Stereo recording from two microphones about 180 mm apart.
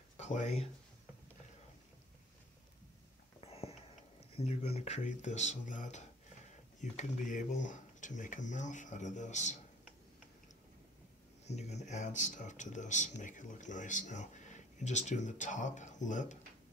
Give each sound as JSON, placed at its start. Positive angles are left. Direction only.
{"t": 0.2, "sound": "speech", "side_deg": 40}
{"t": 3.3, "sound": "a sound", "side_deg": 35}
{"t": 4.4, "sound": "speech", "side_deg": 35}
{"t": 11.4, "sound": "speech", "side_deg": 40}